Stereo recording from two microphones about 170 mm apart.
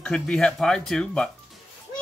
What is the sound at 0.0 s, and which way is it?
Speech, 5° left (ahead or behind).